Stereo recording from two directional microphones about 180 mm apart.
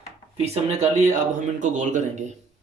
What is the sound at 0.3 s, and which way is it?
Speech, 35° right (ahead or behind).